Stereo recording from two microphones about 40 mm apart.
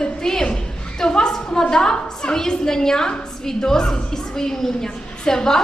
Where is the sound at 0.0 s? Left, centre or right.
Centre.